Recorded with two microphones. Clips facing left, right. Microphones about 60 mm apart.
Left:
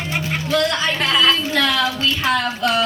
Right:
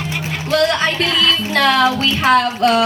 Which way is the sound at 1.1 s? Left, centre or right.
Left.